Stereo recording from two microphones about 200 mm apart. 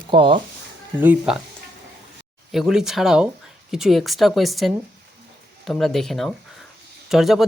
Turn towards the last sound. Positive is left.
turn(degrees=0)  # may be behind; listen again after turning